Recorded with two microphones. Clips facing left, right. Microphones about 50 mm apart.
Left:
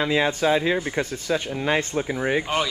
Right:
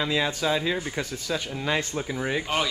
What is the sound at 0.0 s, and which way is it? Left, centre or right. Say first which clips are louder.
Speech: left 4 dB; left.